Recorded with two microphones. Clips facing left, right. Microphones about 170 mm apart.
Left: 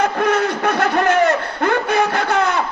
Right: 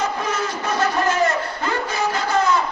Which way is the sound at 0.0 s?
60° left (ahead or behind).